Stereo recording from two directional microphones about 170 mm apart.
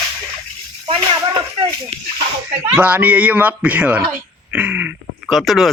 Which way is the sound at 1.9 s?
40° right (ahead or behind).